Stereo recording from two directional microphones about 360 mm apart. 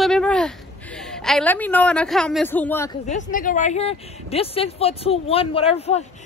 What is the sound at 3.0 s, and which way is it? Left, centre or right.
Speech, left.